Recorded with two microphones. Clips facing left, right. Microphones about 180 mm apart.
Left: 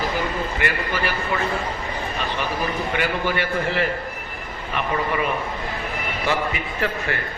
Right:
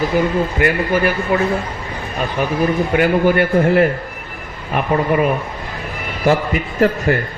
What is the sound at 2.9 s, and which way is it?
A man's voice, 50° right (ahead or behind).